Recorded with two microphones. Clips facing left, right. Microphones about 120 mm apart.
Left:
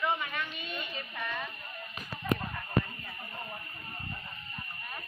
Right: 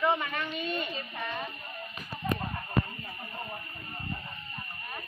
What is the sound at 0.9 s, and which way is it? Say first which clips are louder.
Speech: right 2 dB; 25° right (ahead or behind).